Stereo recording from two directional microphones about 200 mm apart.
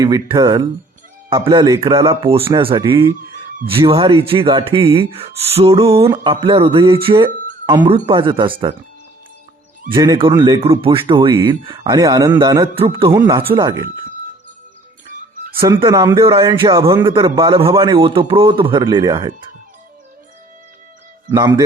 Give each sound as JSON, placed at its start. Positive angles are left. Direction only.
{"t": 0.0, "sound": "speech", "side_deg": -20}
{"t": 9.9, "sound": "speech", "side_deg": -20}
{"t": 15.8, "sound": "speech", "side_deg": -15}
{"t": 21.2, "sound": "speech", "side_deg": -20}